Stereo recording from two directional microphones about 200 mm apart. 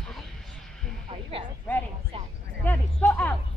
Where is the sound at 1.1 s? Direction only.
25° right (ahead or behind).